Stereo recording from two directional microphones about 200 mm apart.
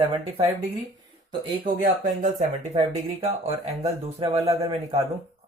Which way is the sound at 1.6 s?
40° right (ahead or behind).